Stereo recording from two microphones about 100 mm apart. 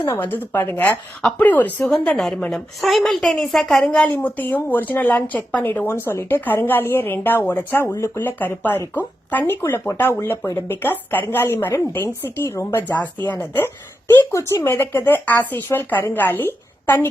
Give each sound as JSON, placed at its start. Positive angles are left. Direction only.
{"t": 0.1, "sound": "speech", "side_deg": 20}
{"t": 2.1, "sound": "a woman's voice", "side_deg": 5}
{"t": 3.9, "sound": "speech", "side_deg": 15}
{"t": 14.3, "sound": "speech", "side_deg": 25}